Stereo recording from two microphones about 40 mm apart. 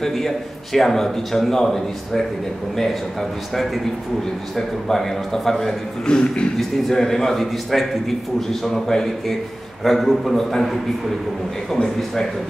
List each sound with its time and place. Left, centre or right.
0.0 s a man's voice: centre
6.0 s speech: left
6.5 s a man's voice: centre